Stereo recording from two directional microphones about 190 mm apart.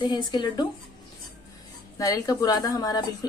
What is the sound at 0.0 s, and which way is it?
Speech, 20° left (ahead or behind).